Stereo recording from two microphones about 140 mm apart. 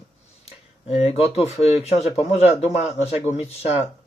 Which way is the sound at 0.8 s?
50° left (ahead or behind).